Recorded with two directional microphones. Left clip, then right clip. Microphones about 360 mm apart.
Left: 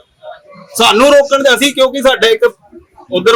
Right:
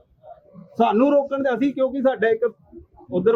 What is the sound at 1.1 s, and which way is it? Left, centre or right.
Speech, centre.